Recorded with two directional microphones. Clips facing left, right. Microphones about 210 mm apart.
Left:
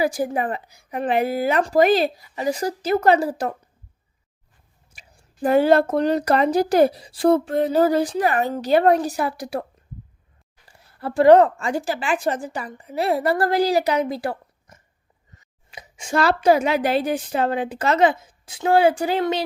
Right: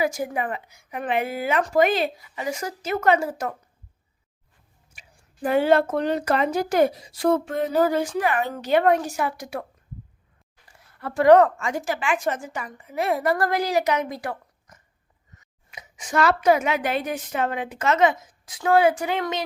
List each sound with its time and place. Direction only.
0.0 s speech: 35° left (ahead or behind)
4.9 s speech: 40° left (ahead or behind)
10.7 s a woman's voice: 30° left (ahead or behind)